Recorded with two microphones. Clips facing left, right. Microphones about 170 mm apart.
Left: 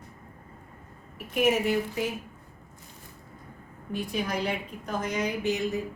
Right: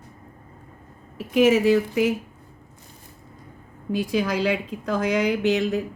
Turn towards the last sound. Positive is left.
turn(degrees=-75)  # may be behind; listen again after turning